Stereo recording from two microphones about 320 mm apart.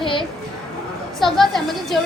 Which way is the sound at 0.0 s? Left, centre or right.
Centre.